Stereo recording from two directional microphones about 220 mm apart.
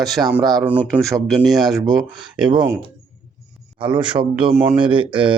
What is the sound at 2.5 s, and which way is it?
A man's voice, 20° right (ahead or behind).